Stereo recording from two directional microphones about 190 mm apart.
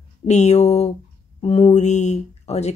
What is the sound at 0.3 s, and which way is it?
Speech, 35° left (ahead or behind).